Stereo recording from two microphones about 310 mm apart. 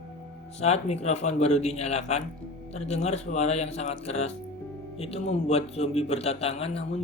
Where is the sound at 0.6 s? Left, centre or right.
Left.